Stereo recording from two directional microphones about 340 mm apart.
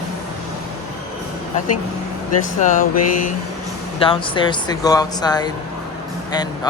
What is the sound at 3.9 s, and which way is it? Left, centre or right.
Speech, centre.